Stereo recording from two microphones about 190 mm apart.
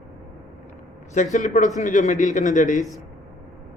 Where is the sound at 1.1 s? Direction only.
40° left (ahead or behind).